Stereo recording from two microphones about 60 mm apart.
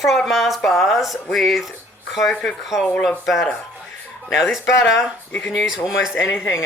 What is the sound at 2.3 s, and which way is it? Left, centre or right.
Speech, centre.